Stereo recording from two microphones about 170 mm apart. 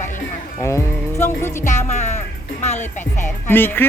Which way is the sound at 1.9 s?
45° left (ahead or behind).